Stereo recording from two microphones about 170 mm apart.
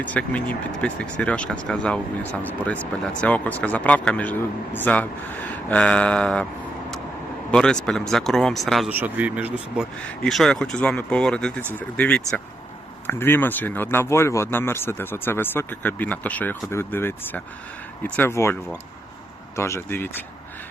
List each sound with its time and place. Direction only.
0.0 s speech: 10° left (ahead or behind)
7.5 s speech: 5° left (ahead or behind)
8.9 s speech: 10° right (ahead or behind)
10.0 s speech: 5° left (ahead or behind)
19.5 s speech: 15° left (ahead or behind)